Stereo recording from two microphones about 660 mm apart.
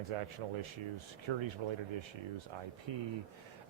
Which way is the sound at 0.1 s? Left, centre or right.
Right.